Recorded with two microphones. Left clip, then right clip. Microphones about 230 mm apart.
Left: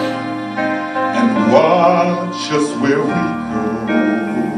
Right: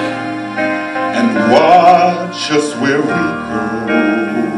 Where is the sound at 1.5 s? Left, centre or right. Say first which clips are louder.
Right 5 dB; centre.